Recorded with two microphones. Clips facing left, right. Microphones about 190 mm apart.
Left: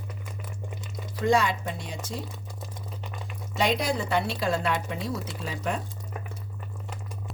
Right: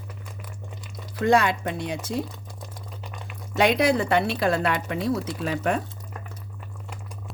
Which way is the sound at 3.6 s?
65° right (ahead or behind).